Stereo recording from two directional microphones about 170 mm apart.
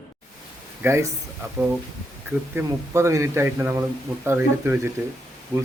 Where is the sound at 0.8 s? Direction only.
15° right (ahead or behind).